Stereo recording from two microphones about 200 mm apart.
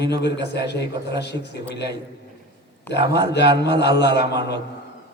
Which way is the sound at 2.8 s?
60° left (ahead or behind).